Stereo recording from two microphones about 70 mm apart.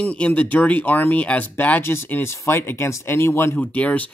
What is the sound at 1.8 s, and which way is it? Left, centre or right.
Speech, left.